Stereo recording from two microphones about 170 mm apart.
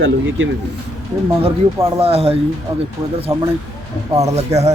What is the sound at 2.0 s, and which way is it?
Speech, 35° right (ahead or behind).